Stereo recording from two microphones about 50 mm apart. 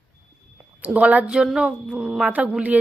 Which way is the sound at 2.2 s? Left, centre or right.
Right.